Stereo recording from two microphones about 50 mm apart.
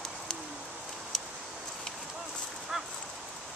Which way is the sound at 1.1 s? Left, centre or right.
Centre.